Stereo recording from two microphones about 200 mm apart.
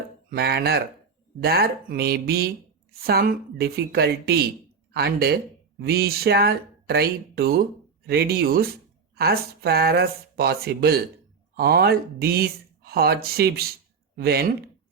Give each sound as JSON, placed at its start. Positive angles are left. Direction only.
{"t": 0.3, "sound": "speech", "side_deg": -50}